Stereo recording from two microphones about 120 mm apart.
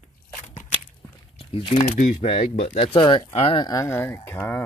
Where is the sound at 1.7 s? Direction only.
90° left.